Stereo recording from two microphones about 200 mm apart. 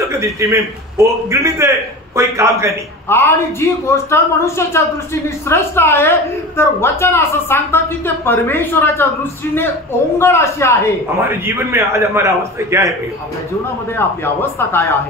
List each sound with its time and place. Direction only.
0.1 s a man's voice: 15° right (ahead or behind)
3.1 s a woman's voice: 15° left (ahead or behind)
11.1 s a man's voice: 15° right (ahead or behind)
13.9 s a woman's voice: 10° left (ahead or behind)